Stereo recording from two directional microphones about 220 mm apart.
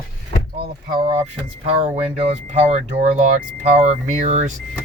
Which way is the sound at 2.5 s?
30° right (ahead or behind).